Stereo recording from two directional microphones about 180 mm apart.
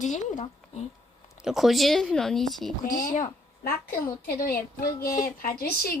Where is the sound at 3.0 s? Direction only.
45° left (ahead or behind).